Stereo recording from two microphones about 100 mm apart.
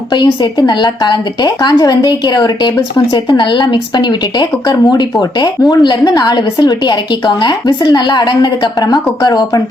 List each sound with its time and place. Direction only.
0.1 s a woman's voice: 45° left (ahead or behind)